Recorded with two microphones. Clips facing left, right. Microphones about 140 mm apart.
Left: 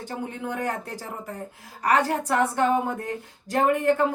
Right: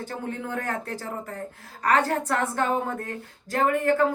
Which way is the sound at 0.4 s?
15° left (ahead or behind).